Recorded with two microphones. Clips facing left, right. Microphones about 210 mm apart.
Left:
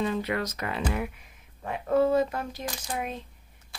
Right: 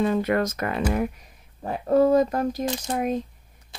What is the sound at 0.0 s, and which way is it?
Speech, 50° right (ahead or behind).